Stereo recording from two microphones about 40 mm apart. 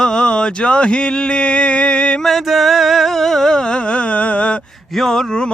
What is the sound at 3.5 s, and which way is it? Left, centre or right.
Carnatic music, centre.